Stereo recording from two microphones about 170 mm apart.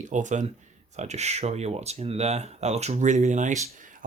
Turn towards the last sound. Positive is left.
turn(degrees=-45)  # may be behind; listen again after turning